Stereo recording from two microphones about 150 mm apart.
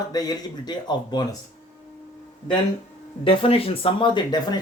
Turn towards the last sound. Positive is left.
turn(degrees=30)  # may be behind; listen again after turning